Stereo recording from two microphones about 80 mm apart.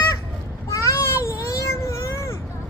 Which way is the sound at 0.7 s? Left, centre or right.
Left.